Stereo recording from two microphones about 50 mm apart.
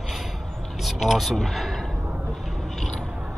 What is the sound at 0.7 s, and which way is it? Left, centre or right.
Speech, centre.